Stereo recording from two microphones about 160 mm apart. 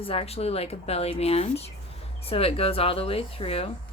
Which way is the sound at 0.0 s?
35° left (ahead or behind).